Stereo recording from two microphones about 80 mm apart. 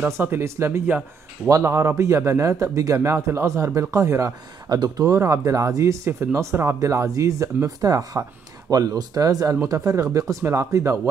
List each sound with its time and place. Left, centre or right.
0.2 s speech: right
4.6 s speech: right
5.1 s speech: right